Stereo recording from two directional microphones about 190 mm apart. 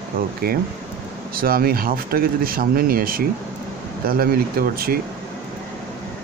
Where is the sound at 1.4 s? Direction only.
50° right (ahead or behind).